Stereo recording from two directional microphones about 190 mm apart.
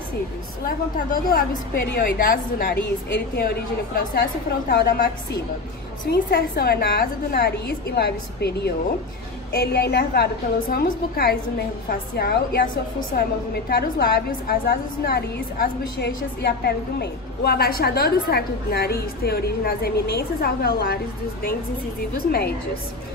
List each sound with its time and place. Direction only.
0.7 s a woman's voice: 50° left (ahead or behind)